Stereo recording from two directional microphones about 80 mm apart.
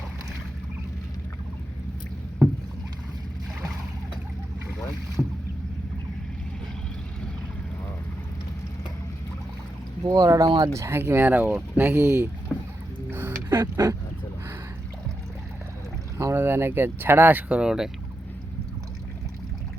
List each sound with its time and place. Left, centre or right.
5.2 s boat: left
10.1 s speech: right
12.5 s boat: centre
13.1 s a sound: right
13.5 s speech: right
16.1 s speech: right
17.6 s speech: centre